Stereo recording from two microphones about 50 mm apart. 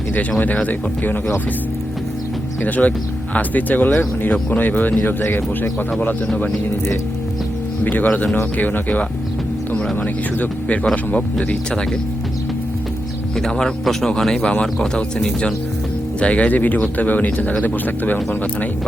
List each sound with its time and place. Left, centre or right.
0.1 s speech: left
2.6 s speech: left
8.0 s speech: left
9.7 s speech: centre
10.9 s speech: left
13.3 s speech: centre; by 18.2 s left